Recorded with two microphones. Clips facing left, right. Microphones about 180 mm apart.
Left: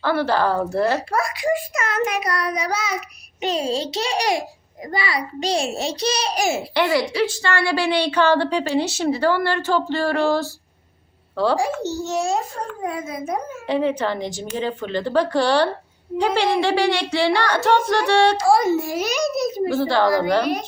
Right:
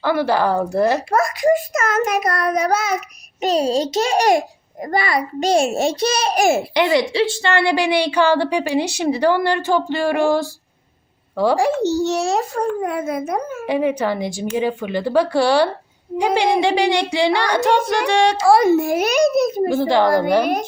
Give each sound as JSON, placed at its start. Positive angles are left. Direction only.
{"t": 0.0, "sound": "a woman's voice", "side_deg": -15}
{"t": 1.1, "sound": "a child's voice", "side_deg": -45}
{"t": 3.4, "sound": "a child's voice", "side_deg": -40}
{"t": 6.7, "sound": "a woman's voice", "side_deg": -20}
{"t": 11.5, "sound": "a child's voice", "side_deg": -75}
{"t": 13.7, "sound": "a woman's voice", "side_deg": -10}
{"t": 18.4, "sound": "a child's voice", "side_deg": -65}